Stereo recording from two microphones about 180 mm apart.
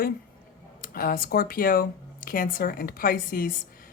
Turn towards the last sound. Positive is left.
turn(degrees=50)  # may be behind; listen again after turning